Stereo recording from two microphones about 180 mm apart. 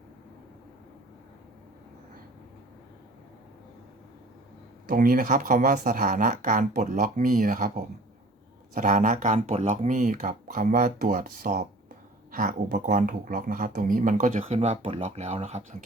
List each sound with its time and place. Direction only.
4.9 s speech: 50° right (ahead or behind)